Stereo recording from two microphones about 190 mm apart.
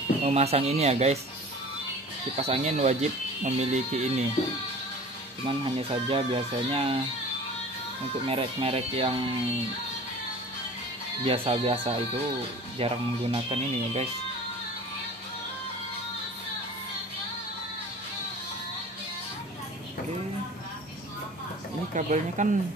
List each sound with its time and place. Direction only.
0.2 s speech: 35° right (ahead or behind)
2.3 s speech: 35° right (ahead or behind)
5.4 s speech: 30° right (ahead or behind)
8.3 s speech: 30° right (ahead or behind)
11.2 s speech: 30° right (ahead or behind)
21.9 s speech: 40° right (ahead or behind)